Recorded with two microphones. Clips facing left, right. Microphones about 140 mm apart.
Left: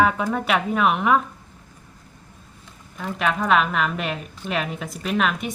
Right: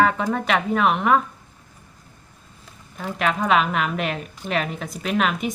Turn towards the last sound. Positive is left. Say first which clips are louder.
# right 1 dB
turn(degrees=0)  # may be behind; listen again after turning